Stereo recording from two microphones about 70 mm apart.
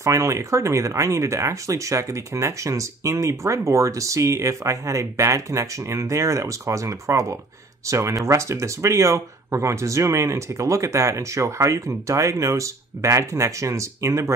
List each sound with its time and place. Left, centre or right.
0.0 s speech: right